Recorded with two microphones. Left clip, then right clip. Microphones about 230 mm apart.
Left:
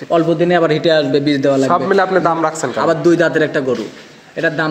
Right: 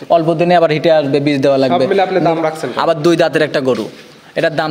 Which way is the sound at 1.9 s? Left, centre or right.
Centre.